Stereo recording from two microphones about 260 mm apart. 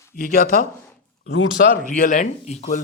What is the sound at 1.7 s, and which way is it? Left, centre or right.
Speech, left.